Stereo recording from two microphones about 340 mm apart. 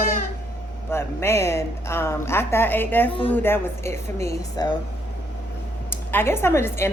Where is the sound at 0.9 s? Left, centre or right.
Centre.